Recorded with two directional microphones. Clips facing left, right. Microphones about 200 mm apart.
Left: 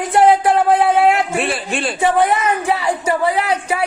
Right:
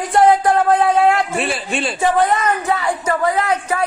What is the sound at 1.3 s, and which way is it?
A man's voice, centre (ahead or behind).